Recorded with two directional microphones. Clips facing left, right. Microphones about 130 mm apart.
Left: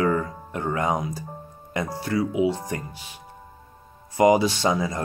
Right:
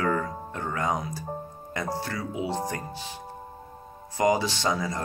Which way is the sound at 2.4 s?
25° right (ahead or behind).